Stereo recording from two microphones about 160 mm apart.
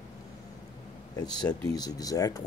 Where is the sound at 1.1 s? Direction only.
25° left (ahead or behind).